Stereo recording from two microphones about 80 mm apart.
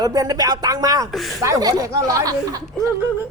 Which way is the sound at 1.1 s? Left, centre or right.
Centre.